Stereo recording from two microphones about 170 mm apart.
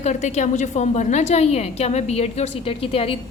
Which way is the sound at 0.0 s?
45° left (ahead or behind).